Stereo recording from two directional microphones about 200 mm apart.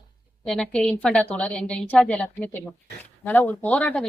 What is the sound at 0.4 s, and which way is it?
A woman's voice, 5° left (ahead or behind).